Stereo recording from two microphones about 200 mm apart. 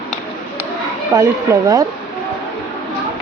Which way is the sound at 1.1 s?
15° right (ahead or behind).